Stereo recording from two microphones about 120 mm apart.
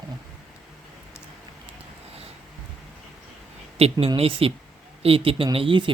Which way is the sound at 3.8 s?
55° right (ahead or behind).